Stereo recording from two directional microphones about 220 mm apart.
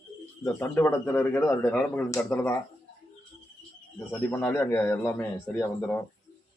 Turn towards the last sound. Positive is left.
turn(degrees=10)  # may be behind; listen again after turning